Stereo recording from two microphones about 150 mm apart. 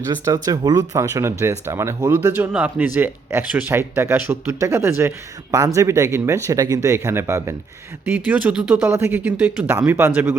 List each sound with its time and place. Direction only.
0.4 s speech: 25° right (ahead or behind)